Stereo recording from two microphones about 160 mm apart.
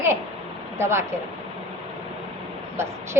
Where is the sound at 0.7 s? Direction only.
15° right (ahead or behind).